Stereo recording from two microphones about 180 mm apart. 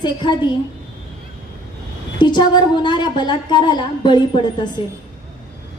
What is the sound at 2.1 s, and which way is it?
A woman's voice, 25° left (ahead or behind).